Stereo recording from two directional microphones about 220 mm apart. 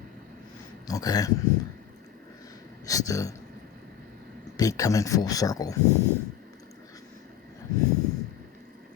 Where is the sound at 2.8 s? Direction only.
15° left (ahead or behind).